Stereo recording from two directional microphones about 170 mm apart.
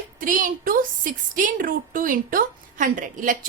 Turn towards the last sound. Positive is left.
turn(degrees=-50)  # may be behind; listen again after turning